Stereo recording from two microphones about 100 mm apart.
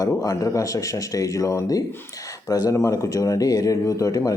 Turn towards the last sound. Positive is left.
turn(degrees=35)  # may be behind; listen again after turning